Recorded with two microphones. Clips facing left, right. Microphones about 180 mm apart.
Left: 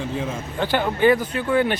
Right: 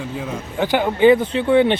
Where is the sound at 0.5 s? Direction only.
15° right (ahead or behind).